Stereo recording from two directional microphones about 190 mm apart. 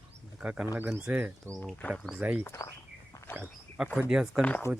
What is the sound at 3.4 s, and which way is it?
Speech, 5° right (ahead or behind).